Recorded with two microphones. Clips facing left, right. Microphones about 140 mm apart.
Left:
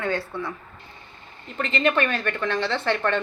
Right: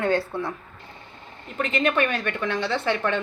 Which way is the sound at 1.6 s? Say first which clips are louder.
Even; 5° right (ahead or behind).